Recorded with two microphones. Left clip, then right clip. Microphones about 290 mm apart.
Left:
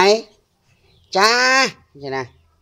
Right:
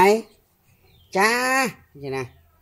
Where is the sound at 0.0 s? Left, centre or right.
Left.